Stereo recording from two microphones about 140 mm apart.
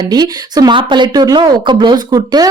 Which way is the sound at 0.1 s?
30° right (ahead or behind).